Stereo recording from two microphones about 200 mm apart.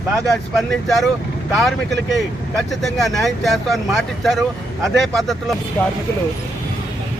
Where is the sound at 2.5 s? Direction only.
Centre (ahead or behind).